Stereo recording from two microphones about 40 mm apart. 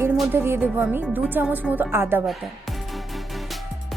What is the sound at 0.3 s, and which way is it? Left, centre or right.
Speech, right.